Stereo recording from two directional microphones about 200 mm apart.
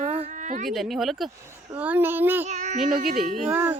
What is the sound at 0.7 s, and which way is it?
A child's voice, centre (ahead or behind).